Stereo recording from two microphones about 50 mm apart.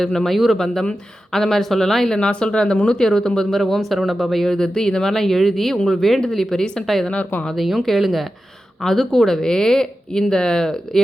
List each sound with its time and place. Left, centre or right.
0.0 s speech: centre
7.1 s speech: left
7.5 s speech: centre